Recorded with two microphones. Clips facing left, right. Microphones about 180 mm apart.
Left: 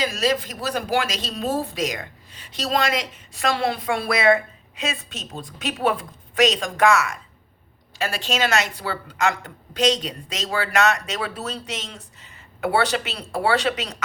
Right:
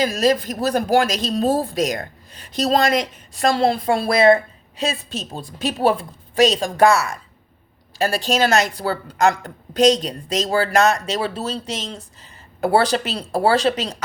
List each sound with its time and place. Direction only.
0.0 s speech: 45° right (ahead or behind)